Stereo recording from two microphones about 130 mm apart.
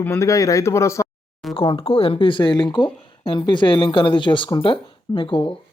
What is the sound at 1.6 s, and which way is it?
Speech, 45° left (ahead or behind).